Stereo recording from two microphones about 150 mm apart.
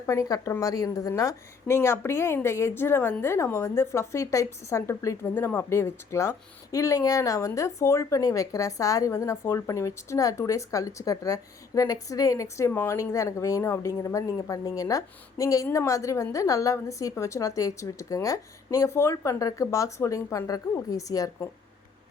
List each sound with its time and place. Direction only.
0.0 s a woman's voice: 20° left (ahead or behind)